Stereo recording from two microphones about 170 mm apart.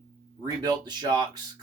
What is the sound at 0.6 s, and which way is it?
Speech, 25° right (ahead or behind).